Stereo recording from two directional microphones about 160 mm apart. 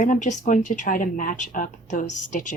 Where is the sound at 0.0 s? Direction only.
50° left (ahead or behind).